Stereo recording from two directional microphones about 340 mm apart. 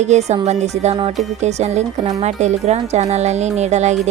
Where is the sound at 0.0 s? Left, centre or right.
Centre.